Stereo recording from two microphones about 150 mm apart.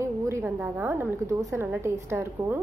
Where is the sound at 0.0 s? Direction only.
20° right (ahead or behind).